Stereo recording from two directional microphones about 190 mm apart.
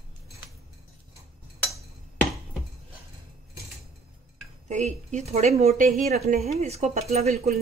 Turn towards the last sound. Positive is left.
turn(degrees=-35)  # may be behind; listen again after turning